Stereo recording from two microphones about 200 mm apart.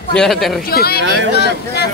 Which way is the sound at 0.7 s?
50° left (ahead or behind).